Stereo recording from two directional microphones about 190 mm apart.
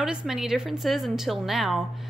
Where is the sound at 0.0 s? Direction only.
5° right (ahead or behind).